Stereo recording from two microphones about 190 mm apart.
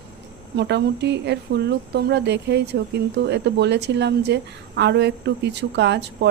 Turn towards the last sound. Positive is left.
turn(degrees=-65)  # may be behind; listen again after turning